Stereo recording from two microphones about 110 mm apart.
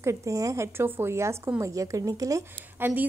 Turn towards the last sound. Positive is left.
turn(degrees=-20)  # may be behind; listen again after turning